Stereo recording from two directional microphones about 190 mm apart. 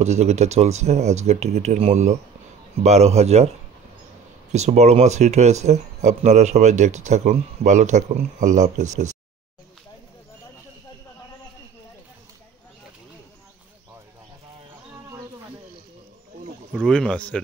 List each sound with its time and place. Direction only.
0.0 s speech: 35° right (ahead or behind)
4.5 s speech: 35° right (ahead or behind)
16.7 s speech: 5° left (ahead or behind)